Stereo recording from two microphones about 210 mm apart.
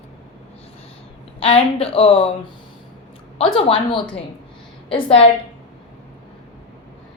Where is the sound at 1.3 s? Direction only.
25° left (ahead or behind).